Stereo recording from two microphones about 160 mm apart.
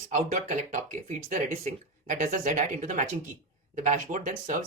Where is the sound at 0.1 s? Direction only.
50° right (ahead or behind).